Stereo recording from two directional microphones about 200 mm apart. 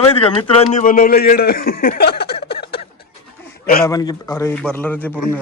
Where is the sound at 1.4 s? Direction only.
50° left (ahead or behind).